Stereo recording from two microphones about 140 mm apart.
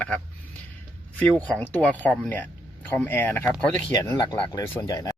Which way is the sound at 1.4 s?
10° left (ahead or behind).